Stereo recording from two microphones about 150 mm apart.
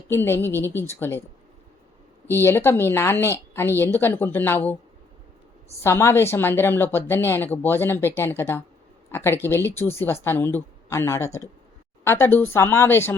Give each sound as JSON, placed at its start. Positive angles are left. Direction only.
{"t": 0.1, "sound": "a woman's voice", "side_deg": 15}
{"t": 2.2, "sound": "a woman's voice", "side_deg": 15}
{"t": 5.8, "sound": "a woman's voice", "side_deg": 15}